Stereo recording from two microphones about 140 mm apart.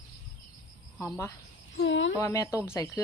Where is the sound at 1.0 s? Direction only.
20° left (ahead or behind).